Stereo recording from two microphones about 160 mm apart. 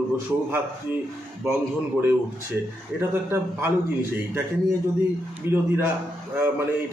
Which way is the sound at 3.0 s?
15° right (ahead or behind).